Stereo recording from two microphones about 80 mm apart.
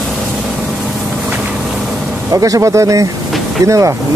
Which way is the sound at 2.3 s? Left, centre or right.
Right.